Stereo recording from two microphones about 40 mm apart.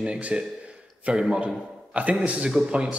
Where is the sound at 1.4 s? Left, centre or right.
Right.